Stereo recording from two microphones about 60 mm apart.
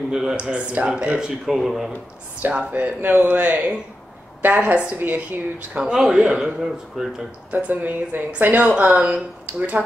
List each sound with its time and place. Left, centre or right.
0.1 s speech: centre
0.5 s speech: right; by 1.9 s centre
2.4 s speech: right
4.9 s speech: right
5.9 s speech: centre
7.5 s speech: right